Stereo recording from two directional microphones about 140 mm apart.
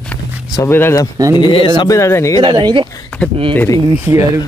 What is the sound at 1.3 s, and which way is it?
Speech, 35° left (ahead or behind).